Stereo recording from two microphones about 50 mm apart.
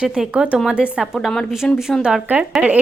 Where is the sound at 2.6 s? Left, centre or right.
Right.